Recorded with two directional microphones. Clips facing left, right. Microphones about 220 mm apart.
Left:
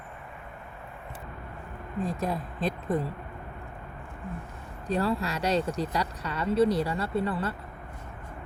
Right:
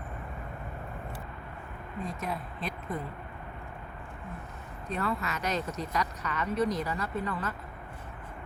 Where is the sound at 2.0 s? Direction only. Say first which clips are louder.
Left 5 dB; 35° left (ahead or behind).